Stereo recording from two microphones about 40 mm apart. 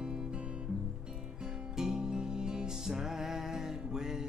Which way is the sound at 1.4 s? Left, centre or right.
Centre.